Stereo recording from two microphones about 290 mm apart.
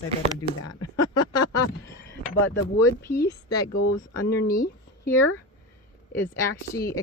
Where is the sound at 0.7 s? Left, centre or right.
Left.